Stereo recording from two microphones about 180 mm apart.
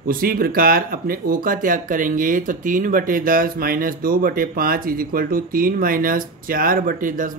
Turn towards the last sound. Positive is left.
turn(degrees=-45)  # may be behind; listen again after turning